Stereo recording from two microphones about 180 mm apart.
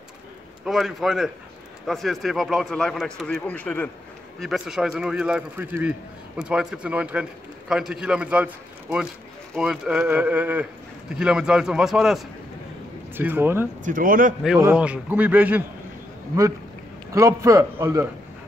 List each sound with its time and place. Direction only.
0.7 s a man's voice: centre (ahead or behind)
4.4 s a man's voice: 5° right (ahead or behind)
13.8 s a man's voice: 50° right (ahead or behind)
14.6 s speech: 10° right (ahead or behind)
17.1 s speech: 15° right (ahead or behind)